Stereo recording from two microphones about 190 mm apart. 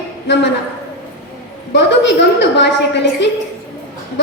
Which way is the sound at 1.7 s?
65° left (ahead or behind).